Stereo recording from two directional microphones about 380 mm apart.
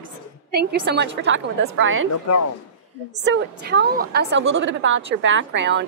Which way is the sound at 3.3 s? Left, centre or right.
Right.